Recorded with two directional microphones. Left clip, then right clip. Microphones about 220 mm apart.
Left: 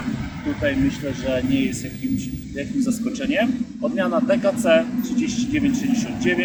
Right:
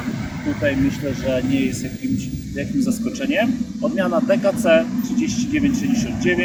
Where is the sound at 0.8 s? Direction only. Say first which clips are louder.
Right 1 dB; 35° right (ahead or behind).